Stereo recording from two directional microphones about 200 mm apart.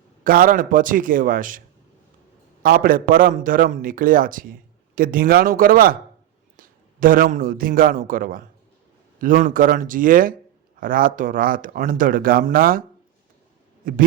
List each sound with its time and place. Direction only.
0.3 s speech: 45° right (ahead or behind)
2.6 s a man's voice: 45° right (ahead or behind)
13.8 s speech: 45° right (ahead or behind)